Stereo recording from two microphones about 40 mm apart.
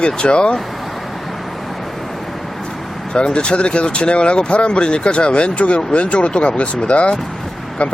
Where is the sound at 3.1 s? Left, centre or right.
Left.